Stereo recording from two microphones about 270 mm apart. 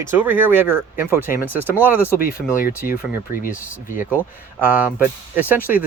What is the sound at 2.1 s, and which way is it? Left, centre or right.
Speech, left.